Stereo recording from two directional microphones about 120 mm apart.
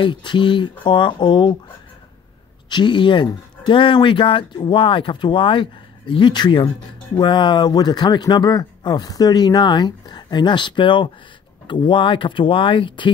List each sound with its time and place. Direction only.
0.0 s speech: 40° left (ahead or behind)
2.7 s speech: 40° left (ahead or behind)